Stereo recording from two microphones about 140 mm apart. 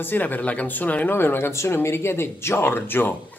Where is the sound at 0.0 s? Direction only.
15° left (ahead or behind).